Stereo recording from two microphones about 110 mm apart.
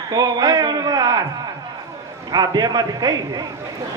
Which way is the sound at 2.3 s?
35° right (ahead or behind).